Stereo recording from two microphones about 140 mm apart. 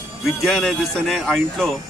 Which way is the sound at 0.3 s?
Centre (ahead or behind).